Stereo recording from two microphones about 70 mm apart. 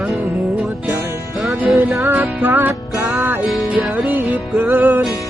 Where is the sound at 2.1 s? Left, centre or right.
Right.